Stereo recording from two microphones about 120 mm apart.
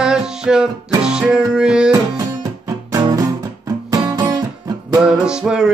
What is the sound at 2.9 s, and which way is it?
Music, 30° right (ahead or behind).